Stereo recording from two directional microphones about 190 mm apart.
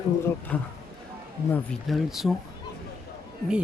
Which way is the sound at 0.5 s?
5° left (ahead or behind).